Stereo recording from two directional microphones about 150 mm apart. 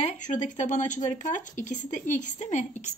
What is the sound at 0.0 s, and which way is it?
Speech, 55° left (ahead or behind).